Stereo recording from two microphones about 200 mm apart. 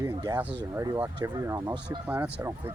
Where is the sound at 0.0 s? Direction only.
20° right (ahead or behind).